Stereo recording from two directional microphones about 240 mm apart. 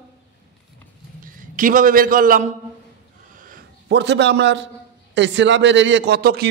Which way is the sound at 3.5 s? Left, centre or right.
Right.